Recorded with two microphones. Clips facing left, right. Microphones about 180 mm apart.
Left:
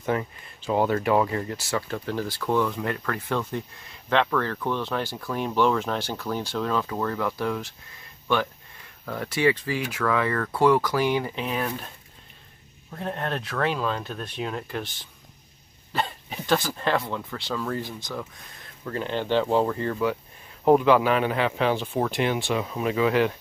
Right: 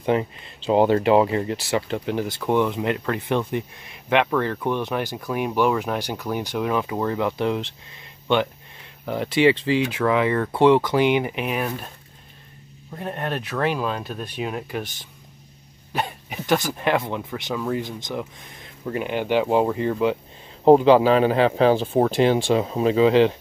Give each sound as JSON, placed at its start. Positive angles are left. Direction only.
{"t": 0.0, "sound": "speech", "side_deg": -20}
{"t": 12.9, "sound": "speech", "side_deg": -10}
{"t": 15.9, "sound": "speech", "side_deg": -15}
{"t": 20.6, "sound": "speech", "side_deg": -30}